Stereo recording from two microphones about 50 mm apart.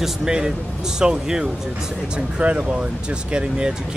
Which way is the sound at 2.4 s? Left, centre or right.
Right.